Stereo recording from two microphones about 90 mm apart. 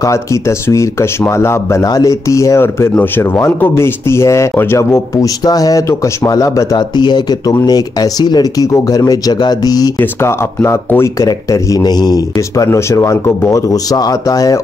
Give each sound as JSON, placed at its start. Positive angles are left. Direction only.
{"t": 0.0, "sound": "speech", "side_deg": 35}
{"t": 1.9, "sound": "speech", "side_deg": 40}
{"t": 5.4, "sound": "speech", "side_deg": 45}
{"t": 10.2, "sound": "speech", "side_deg": 30}
{"t": 11.1, "sound": "speech", "side_deg": 40}
{"t": 12.6, "sound": "speech", "side_deg": 35}